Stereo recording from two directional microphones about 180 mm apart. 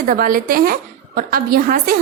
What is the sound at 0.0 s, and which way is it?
A woman's voice, 50° right (ahead or behind).